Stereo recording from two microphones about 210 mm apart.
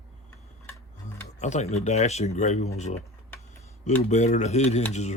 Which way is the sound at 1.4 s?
35° left (ahead or behind).